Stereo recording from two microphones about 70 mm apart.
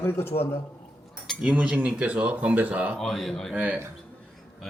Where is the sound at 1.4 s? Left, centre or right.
Centre.